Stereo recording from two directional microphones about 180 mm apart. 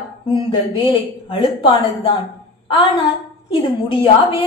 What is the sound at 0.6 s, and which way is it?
A woman's voice, 25° left (ahead or behind).